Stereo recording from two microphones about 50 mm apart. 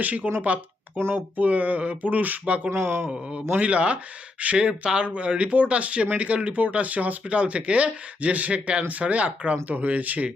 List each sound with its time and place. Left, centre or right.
0.0 s speech: right
2.6 s speech: right
3.6 s speech: right